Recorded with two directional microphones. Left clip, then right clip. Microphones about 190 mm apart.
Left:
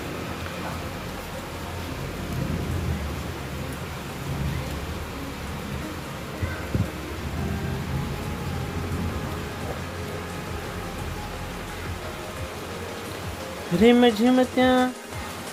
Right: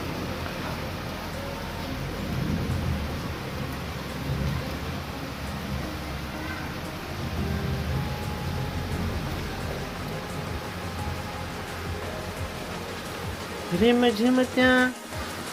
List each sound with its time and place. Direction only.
13.8 s speech: 15° left (ahead or behind)